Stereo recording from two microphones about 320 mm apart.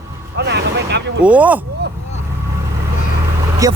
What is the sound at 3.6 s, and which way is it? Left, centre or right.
Speech, centre.